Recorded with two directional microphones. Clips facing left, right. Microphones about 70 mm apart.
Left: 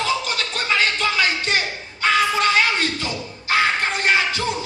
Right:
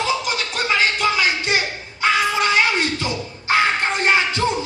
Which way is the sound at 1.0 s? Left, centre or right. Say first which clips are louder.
Right 2 dB; centre.